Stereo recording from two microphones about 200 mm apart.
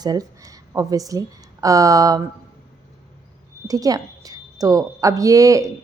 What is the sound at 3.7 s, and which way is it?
A woman's voice, 20° right (ahead or behind).